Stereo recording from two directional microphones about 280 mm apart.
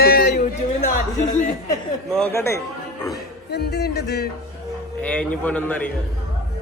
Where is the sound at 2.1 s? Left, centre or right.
Centre.